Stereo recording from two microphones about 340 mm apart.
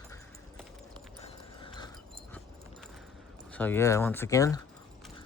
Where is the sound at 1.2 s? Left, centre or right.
Centre.